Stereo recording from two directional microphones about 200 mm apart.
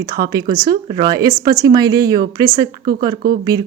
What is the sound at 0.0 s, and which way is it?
A woman's voice, 20° right (ahead or behind).